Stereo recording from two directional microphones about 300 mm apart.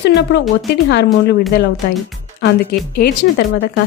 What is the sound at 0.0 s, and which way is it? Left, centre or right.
A woman's voice, left.